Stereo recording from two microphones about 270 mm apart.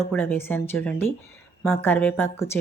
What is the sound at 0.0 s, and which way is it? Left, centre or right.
A woman's voice, centre.